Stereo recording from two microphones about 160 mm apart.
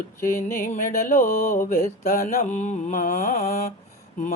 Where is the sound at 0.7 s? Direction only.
55° left (ahead or behind).